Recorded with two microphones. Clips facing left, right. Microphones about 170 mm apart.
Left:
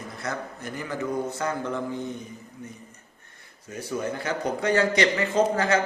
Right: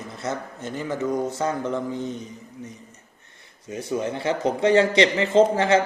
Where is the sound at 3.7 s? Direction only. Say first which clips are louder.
Right 3 dB; 20° right (ahead or behind).